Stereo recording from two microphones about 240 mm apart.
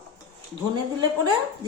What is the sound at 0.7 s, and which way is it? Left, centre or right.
Speech, centre.